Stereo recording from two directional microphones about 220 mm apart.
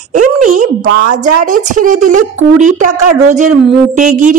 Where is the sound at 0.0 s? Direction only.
35° right (ahead or behind).